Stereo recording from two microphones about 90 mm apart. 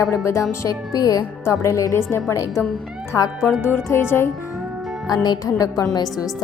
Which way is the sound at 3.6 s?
25° left (ahead or behind).